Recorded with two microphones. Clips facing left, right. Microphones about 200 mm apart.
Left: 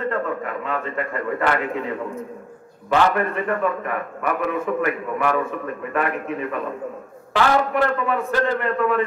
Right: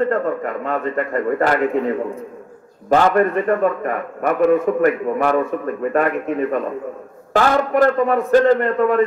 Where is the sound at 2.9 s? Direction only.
40° right (ahead or behind).